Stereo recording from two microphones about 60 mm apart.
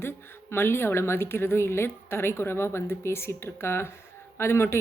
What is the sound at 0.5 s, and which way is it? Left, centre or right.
A woman's voice, left.